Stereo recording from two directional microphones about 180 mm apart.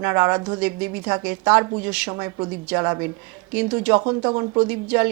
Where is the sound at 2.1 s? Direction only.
20° right (ahead or behind).